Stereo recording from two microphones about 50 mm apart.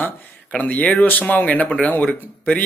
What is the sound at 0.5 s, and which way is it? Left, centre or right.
Speech, left.